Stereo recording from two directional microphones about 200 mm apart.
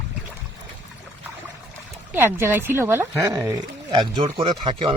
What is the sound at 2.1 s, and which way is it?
Speech, 10° right (ahead or behind).